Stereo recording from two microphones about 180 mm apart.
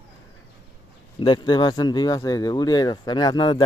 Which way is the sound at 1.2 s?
25° left (ahead or behind).